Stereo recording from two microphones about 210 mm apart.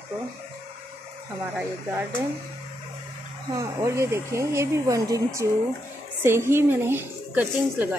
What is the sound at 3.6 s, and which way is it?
A woman's voice, 15° right (ahead or behind).